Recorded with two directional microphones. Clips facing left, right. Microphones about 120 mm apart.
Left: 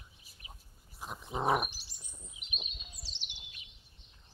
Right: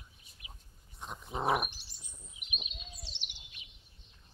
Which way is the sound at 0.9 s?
5° left (ahead or behind).